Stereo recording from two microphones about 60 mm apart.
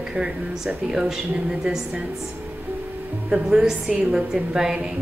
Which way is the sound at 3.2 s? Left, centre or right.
Centre.